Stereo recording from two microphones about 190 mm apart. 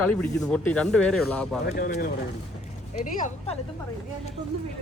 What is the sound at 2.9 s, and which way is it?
Speech, 40° left (ahead or behind).